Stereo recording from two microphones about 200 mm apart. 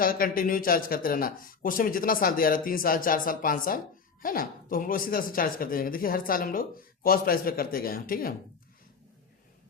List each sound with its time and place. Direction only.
0.0 s speech: 45° left (ahead or behind)